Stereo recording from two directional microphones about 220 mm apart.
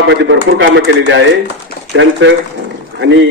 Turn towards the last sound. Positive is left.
turn(degrees=-55)  # may be behind; listen again after turning